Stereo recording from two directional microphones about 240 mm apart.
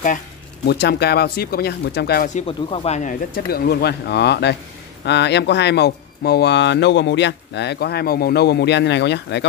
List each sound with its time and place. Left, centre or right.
0.7 s speech: left